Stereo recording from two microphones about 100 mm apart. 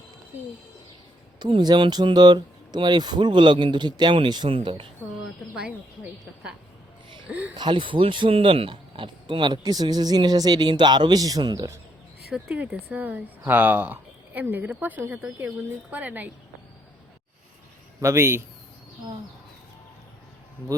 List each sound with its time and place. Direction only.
1.4 s speech: 50° right (ahead or behind)
4.4 s speech: 65° right (ahead or behind)
5.2 s speech: 10° right (ahead or behind)
7.3 s speech: 15° right (ahead or behind)
7.5 s speech: 55° right (ahead or behind)
12.3 s speech: 10° right (ahead or behind)
18.0 s a man's voice: 25° right (ahead or behind)